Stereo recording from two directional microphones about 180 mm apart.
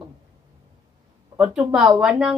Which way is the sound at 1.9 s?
5° right (ahead or behind).